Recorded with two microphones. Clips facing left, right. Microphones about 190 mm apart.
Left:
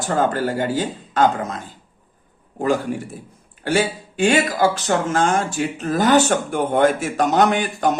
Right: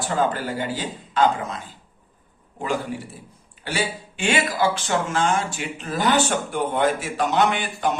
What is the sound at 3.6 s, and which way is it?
Speech, 50° left (ahead or behind).